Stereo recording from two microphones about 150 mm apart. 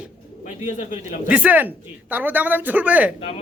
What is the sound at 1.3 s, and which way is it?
Speech, 10° right (ahead or behind).